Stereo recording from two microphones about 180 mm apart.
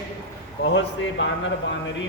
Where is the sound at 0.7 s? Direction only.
85° left.